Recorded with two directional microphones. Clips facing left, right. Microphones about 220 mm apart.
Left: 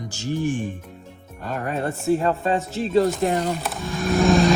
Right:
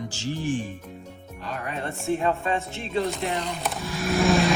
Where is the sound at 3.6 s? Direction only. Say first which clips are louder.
Left 1 dB; centre (ahead or behind).